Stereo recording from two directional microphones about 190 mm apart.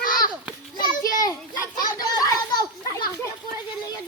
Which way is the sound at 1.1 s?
20° left (ahead or behind).